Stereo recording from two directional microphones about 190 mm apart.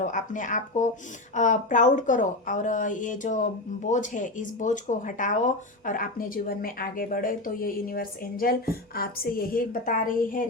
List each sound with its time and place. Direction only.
0.0 s a woman's voice: 40° left (ahead or behind)